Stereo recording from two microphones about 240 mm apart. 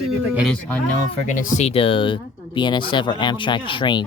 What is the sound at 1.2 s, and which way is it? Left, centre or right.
Speech, left.